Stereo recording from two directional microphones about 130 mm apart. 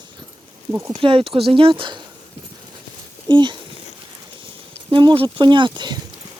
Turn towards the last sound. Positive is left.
turn(degrees=-35)  # may be behind; listen again after turning